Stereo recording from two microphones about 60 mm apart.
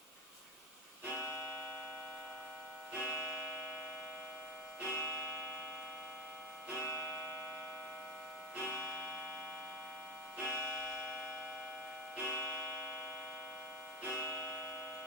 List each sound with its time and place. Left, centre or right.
3.0 s music: left
4.9 s music: left
6.7 s music: left
8.6 s music: left
10.4 s clock: left
12.2 s music: left
14.1 s music: left